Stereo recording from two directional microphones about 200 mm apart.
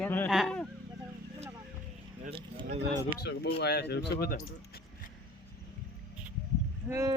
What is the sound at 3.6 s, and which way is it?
Speech, 55° left (ahead or behind).